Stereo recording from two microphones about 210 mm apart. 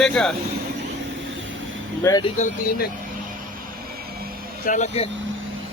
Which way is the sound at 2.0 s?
20° left (ahead or behind).